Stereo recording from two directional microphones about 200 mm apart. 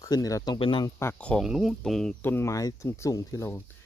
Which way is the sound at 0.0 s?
15° left (ahead or behind).